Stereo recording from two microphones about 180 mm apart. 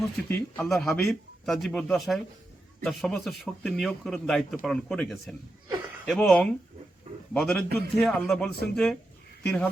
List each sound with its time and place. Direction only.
0.3 s a man's voice: 10° left (ahead or behind)